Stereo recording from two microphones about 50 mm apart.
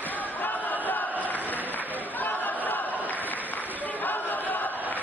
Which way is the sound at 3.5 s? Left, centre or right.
Left.